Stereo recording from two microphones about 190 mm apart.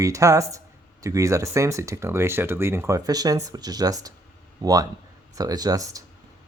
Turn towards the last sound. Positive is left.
turn(degrees=-20)  # may be behind; listen again after turning